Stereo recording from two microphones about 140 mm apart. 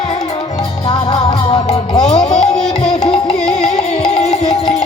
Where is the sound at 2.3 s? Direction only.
5° left (ahead or behind).